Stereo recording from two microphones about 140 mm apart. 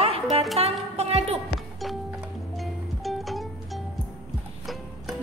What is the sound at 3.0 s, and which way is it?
Music, centre (ahead or behind).